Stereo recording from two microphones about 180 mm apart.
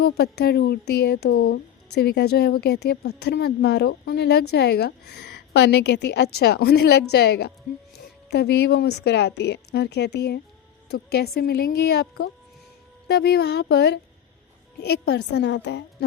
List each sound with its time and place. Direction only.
0.0 s speech: 65° left (ahead or behind)